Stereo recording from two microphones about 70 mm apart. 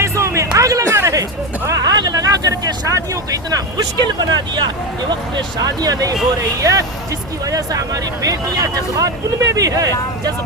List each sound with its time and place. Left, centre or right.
0.0 s music: right
0.5 s a sound: right
0.9 s music: right
1.7 s vehicle: right
4.4 s speech: right
6.6 s speech: right